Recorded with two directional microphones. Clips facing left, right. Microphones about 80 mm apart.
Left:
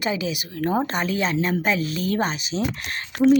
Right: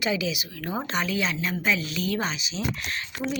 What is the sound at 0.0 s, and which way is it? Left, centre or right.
A woman's voice, left.